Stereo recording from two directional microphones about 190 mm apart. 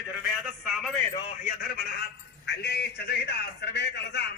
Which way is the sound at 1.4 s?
50° left (ahead or behind).